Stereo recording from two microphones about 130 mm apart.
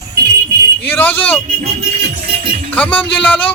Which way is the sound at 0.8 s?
15° left (ahead or behind).